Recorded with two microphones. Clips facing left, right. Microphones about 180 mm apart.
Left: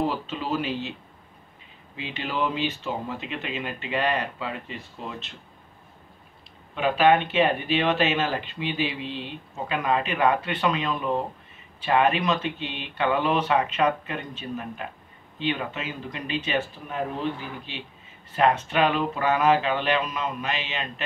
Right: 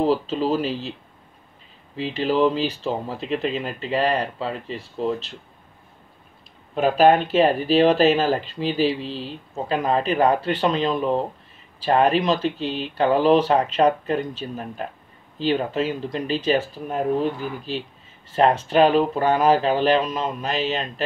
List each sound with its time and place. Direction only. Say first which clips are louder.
0.0 s speech: right 7 dB; 35° right (ahead or behind)
2.0 s speech: right 8 dB; 35° right (ahead or behind)
6.7 s speech: right 4 dB; 40° right (ahead or behind)